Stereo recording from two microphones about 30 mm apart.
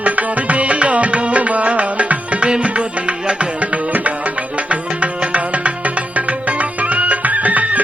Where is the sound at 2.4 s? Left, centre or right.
Right.